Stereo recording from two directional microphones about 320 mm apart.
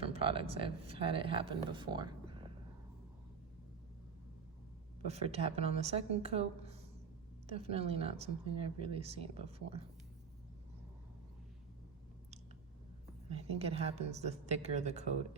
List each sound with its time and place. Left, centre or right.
0.1 s speech: centre
5.0 s a woman's voice: centre
13.3 s a woman's voice: centre